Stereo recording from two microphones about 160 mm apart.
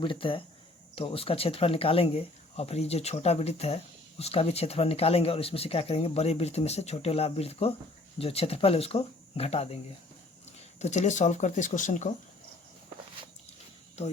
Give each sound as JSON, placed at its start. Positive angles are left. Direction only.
{"t": 0.0, "sound": "speech", "side_deg": 35}
{"t": 10.8, "sound": "speech", "side_deg": 45}